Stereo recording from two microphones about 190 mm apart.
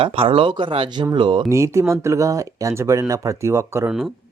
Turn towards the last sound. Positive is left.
turn(degrees=-15)  # may be behind; listen again after turning